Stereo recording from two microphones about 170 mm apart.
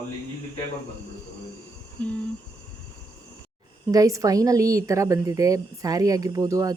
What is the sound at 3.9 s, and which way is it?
A woman's voice, 20° right (ahead or behind).